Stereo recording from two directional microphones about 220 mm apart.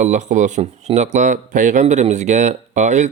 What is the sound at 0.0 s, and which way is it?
Speech, 30° right (ahead or behind).